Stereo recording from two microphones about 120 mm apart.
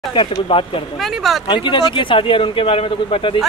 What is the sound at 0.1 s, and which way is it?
Speech, 45° left (ahead or behind).